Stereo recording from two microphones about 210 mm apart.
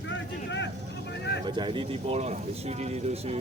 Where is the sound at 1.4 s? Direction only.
20° right (ahead or behind).